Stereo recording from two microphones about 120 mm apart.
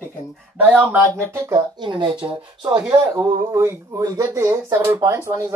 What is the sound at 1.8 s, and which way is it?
Speech, 40° right (ahead or behind).